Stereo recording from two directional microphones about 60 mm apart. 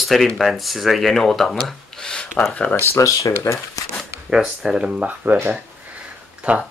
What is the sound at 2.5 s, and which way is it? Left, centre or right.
Speech, left.